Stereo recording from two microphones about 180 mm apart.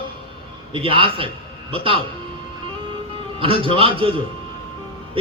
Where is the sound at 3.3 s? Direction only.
30° right (ahead or behind).